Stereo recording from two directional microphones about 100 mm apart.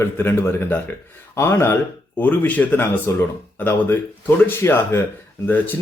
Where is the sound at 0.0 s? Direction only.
25° left (ahead or behind).